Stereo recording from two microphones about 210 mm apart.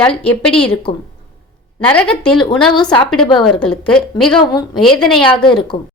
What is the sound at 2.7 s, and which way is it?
Speech, 20° left (ahead or behind).